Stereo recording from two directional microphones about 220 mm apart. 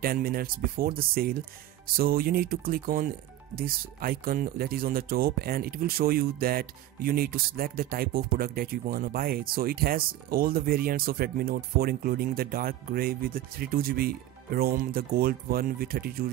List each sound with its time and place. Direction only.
0.0 s speech: 40° right (ahead or behind)